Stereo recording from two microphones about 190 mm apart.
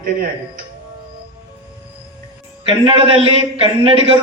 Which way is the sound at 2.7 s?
30° right (ahead or behind).